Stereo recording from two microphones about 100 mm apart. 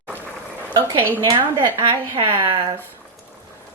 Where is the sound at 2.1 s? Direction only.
55° right (ahead or behind).